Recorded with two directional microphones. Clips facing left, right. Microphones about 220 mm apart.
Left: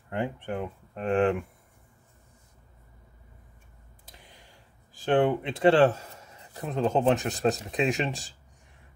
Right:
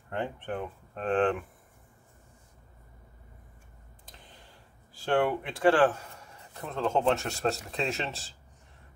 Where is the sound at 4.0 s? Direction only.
10° left (ahead or behind).